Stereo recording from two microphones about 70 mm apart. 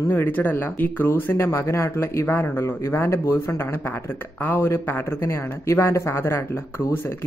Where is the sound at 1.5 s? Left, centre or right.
Left.